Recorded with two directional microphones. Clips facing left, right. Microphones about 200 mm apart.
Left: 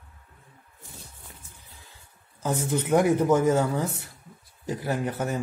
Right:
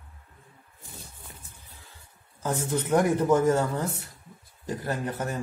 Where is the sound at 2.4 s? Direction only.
20° left (ahead or behind).